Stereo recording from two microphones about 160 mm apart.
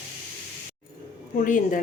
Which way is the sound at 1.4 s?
55° left (ahead or behind).